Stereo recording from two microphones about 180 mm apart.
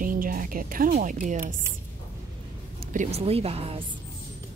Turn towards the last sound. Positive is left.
turn(degrees=-35)  # may be behind; listen again after turning